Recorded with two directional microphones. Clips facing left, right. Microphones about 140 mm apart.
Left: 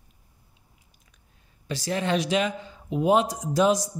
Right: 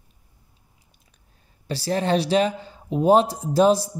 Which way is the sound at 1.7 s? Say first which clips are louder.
Right 4 dB; 35° right (ahead or behind).